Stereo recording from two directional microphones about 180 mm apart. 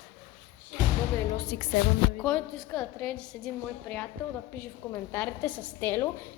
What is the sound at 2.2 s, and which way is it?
A woman's voice, 5° left (ahead or behind).